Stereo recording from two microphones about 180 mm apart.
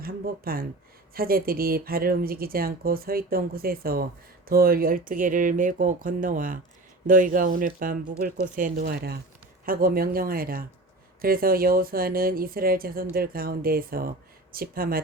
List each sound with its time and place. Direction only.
0.0 s speech: 55° right (ahead or behind)